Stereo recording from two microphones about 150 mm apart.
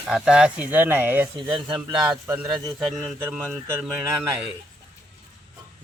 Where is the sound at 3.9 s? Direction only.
20° right (ahead or behind).